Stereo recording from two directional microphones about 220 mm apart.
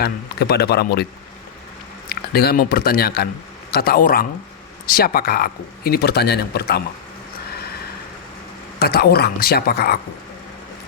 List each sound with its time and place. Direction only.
0.0 s speech: 45° left (ahead or behind)
2.0 s speech: 45° left (ahead or behind)
8.8 s speech: 45° left (ahead or behind)